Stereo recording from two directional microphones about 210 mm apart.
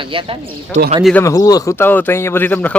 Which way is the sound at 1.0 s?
5° left (ahead or behind).